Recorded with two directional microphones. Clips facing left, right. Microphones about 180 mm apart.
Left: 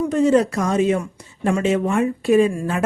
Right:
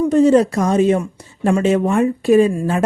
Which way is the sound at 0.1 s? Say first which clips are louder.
Right 4 dB; 35° right (ahead or behind).